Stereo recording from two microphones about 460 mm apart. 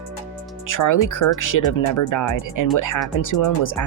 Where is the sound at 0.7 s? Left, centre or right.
Left.